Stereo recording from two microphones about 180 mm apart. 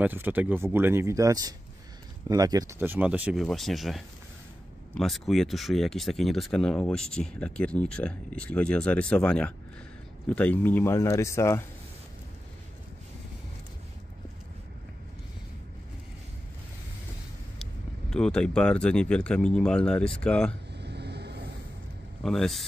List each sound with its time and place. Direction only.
0.0 s a man's voice: 10° right (ahead or behind); by 11.6 s 15° left (ahead or behind)
18.1 s speech: 5° left (ahead or behind)
20.7 s vehicle: 65° right (ahead or behind)
22.2 s speech: centre (ahead or behind)